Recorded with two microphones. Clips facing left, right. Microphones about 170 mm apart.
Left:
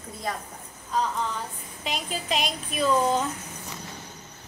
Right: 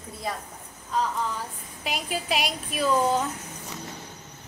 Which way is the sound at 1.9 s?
5° right (ahead or behind).